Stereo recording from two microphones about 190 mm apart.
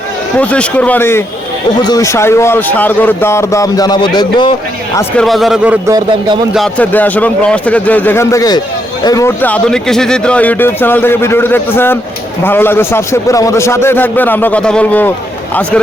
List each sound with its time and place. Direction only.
0.3 s speech: 5° left (ahead or behind); by 4.5 s 25° left (ahead or behind)
5.1 s a man's voice: centre (ahead or behind)
5.9 s speech: 25° right (ahead or behind)
6.5 s speech: 5° left (ahead or behind)